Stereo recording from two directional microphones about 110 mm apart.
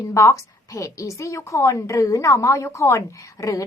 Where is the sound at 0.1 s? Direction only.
30° left (ahead or behind).